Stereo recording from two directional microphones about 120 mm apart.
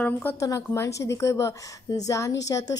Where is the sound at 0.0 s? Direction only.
15° left (ahead or behind).